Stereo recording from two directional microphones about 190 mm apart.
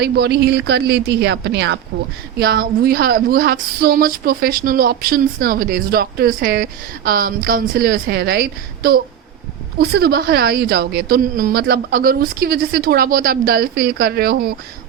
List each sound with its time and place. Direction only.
0.0 s speech: 60° right (ahead or behind)